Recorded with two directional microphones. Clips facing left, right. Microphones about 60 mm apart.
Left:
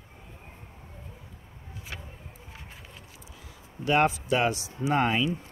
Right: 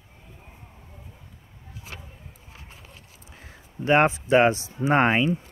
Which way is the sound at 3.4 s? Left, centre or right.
Right.